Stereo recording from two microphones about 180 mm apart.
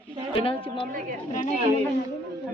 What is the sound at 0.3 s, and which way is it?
Speech, 30° left (ahead or behind).